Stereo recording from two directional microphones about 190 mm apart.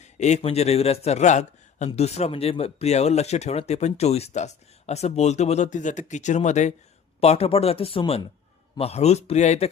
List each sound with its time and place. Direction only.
0.0 s a man's voice: 35° left (ahead or behind)